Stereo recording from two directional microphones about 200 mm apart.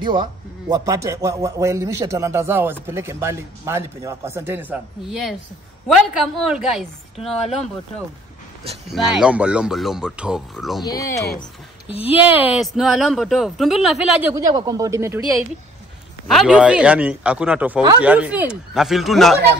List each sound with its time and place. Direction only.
0.0 s a man's voice: 25° right (ahead or behind); by 6.8 s centre (ahead or behind)
8.9 s speech: centre (ahead or behind)
10.8 s speech: 20° left (ahead or behind)
12.1 s a man's voice: 10° right (ahead or behind)
14.3 s a man's voice: 15° right (ahead or behind)
16.3 s speech: centre (ahead or behind)